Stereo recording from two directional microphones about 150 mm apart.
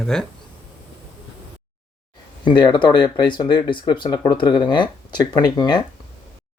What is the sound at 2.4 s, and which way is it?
Speech, 30° left (ahead or behind).